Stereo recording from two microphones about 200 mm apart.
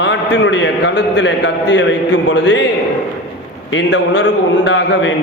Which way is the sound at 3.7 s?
60° left (ahead or behind).